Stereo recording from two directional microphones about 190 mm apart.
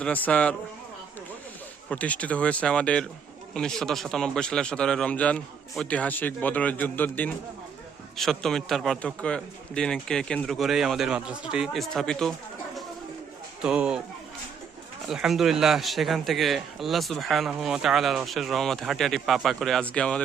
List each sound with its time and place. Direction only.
0.0 s speech: 10° left (ahead or behind)
1.9 s a man's voice: 5° left (ahead or behind)
13.6 s a man's voice: 5° right (ahead or behind)
15.0 s a man's voice: centre (ahead or behind)